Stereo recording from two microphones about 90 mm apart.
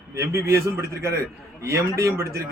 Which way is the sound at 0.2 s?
30° right (ahead or behind).